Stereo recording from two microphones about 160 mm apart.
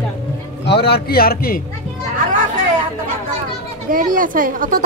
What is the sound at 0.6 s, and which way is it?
A man's voice, 90° left.